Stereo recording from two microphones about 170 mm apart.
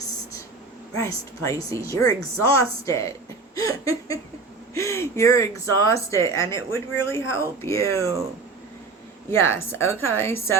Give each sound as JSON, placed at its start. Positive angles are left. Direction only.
{"t": 0.9, "sound": "a woman's voice", "side_deg": 20}
{"t": 3.5, "sound": "a sound", "side_deg": 20}
{"t": 4.7, "sound": "a woman's voice", "side_deg": 15}
{"t": 9.4, "sound": "a woman's voice", "side_deg": 15}